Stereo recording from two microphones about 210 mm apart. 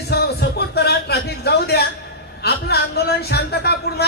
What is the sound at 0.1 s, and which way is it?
Music, 50° left (ahead or behind).